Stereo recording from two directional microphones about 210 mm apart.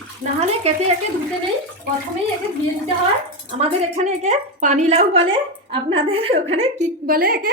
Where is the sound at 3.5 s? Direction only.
30° right (ahead or behind).